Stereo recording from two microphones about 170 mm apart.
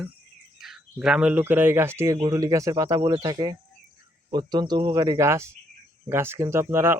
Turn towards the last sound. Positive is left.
turn(degrees=-15)  # may be behind; listen again after turning